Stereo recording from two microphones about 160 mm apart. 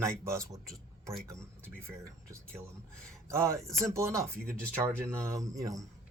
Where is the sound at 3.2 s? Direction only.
15° right (ahead or behind).